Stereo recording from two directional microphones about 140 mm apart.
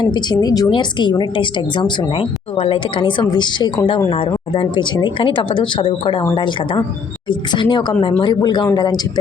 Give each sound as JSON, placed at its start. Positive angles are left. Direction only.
{"t": 0.0, "sound": "speech", "side_deg": 30}